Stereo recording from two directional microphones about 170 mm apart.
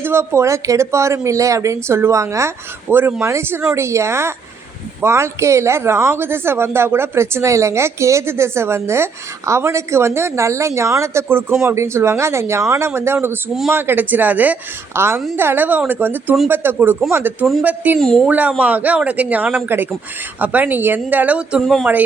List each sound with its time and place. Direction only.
0.0 s a woman's voice: 15° right (ahead or behind)
18.0 s speech: 5° left (ahead or behind)
18.3 s a woman's voice: 10° right (ahead or behind)